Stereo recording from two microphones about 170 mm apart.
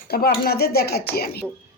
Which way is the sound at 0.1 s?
65° left (ahead or behind).